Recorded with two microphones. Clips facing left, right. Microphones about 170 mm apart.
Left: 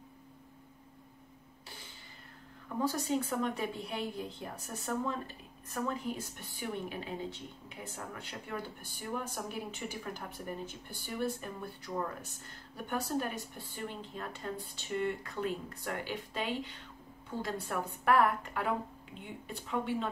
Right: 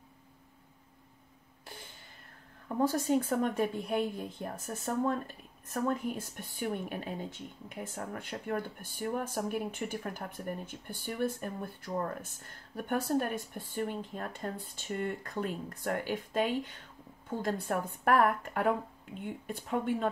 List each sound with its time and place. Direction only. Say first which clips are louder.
2.8 s a woman's voice: right 4 dB; 50° right (ahead or behind)